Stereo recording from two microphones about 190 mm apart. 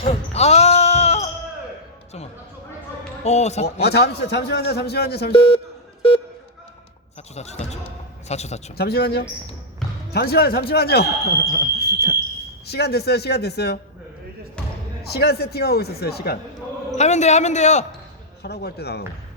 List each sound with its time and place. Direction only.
0.0 s basketball bounce: 30° left (ahead or behind)
3.2 s a man's voice: 35° left (ahead or behind)
3.8 s speech: 60° left (ahead or behind)
5.3 s speech: 25° left (ahead or behind)
7.6 s music: 35° left (ahead or behind)
8.8 s speech: 55° left (ahead or behind)
15.0 s speech: 55° left (ahead or behind)
17.0 s a man's voice: 35° left (ahead or behind)
18.4 s speech: 60° left (ahead or behind)